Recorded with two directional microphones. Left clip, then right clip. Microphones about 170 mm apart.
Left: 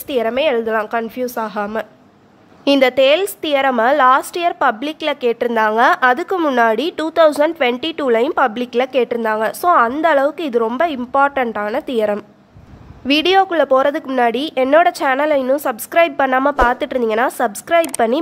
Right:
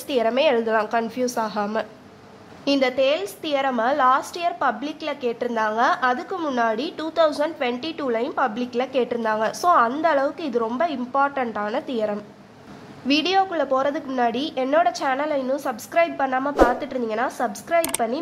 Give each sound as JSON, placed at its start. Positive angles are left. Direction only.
{"t": 0.1, "sound": "a woman's voice", "side_deg": 25}